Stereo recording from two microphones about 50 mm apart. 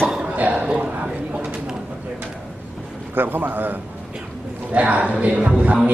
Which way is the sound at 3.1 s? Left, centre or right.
Right.